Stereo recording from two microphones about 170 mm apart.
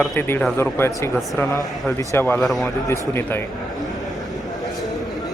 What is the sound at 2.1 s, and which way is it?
Speech, 10° left (ahead or behind).